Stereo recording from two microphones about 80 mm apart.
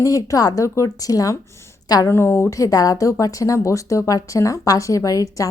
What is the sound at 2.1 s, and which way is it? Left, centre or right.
Speech, left.